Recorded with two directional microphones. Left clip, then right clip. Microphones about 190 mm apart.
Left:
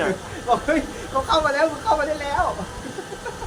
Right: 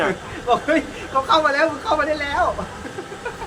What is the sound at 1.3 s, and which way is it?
Speech, centre (ahead or behind).